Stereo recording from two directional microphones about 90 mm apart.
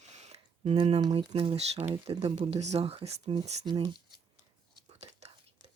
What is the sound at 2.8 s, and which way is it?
Speech, 75° right (ahead or behind).